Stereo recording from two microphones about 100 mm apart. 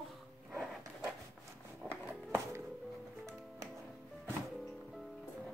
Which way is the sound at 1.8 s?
25° right (ahead or behind).